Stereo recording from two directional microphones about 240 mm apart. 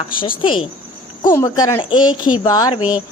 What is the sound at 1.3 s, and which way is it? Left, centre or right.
Speech, centre.